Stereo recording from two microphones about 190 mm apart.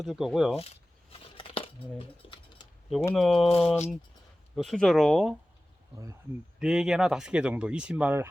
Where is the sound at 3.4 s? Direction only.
30° left (ahead or behind).